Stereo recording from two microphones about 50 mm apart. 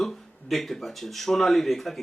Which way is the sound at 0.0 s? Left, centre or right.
Centre.